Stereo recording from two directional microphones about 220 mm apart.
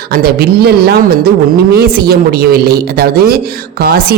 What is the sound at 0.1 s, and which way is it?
Speech, 45° right (ahead or behind).